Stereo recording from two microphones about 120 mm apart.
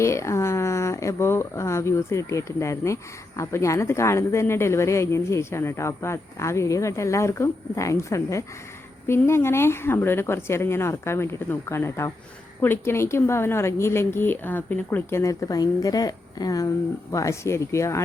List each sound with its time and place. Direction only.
0.0 s speech: 25° left (ahead or behind)